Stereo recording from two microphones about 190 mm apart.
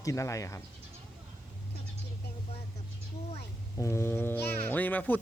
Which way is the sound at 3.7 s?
15° left (ahead or behind).